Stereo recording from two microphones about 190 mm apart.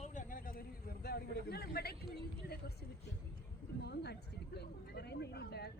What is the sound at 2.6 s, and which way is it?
A woman's voice, 55° left (ahead or behind).